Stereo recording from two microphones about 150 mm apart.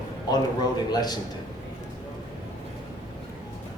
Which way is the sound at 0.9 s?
25° left (ahead or behind).